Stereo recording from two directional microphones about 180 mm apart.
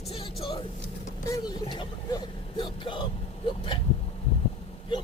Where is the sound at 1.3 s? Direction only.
25° left (ahead or behind).